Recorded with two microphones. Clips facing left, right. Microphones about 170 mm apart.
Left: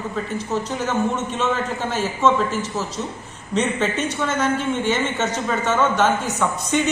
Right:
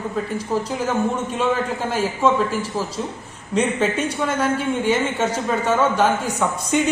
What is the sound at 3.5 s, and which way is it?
Speech, 10° right (ahead or behind).